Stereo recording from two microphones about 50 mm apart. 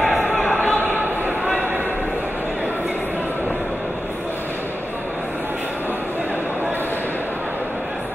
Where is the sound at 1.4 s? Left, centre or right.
Right.